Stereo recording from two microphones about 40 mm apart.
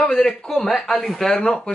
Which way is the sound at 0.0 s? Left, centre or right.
Centre.